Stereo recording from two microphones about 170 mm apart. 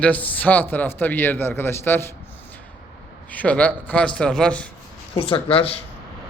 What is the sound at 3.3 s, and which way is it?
Speech, 10° left (ahead or behind).